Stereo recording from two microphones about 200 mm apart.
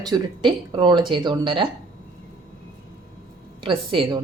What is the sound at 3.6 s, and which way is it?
Speech, 25° right (ahead or behind).